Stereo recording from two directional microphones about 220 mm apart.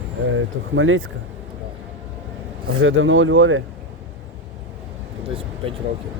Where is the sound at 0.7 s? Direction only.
65° right (ahead or behind).